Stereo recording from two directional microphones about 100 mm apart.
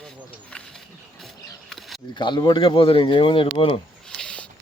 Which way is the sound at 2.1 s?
50° left (ahead or behind).